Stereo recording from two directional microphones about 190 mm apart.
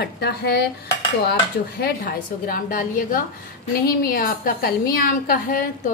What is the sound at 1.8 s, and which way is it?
A woman's voice, 50° left (ahead or behind).